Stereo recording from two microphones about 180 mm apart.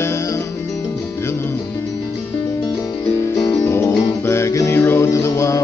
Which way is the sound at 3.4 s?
20° left (ahead or behind).